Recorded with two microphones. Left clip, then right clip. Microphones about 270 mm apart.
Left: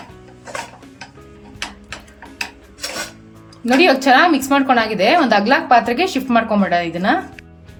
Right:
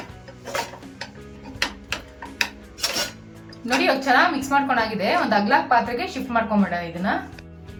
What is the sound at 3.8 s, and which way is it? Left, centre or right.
A woman's voice, left.